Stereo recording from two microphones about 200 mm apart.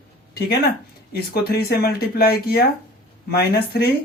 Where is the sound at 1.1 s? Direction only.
50° left (ahead or behind).